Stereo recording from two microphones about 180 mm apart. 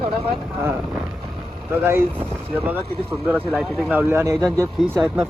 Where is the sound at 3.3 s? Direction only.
5° right (ahead or behind).